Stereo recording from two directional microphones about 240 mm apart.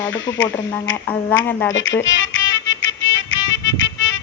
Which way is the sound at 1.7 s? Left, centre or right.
Left.